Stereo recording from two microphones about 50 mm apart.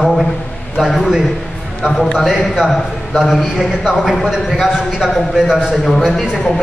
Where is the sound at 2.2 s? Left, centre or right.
Centre.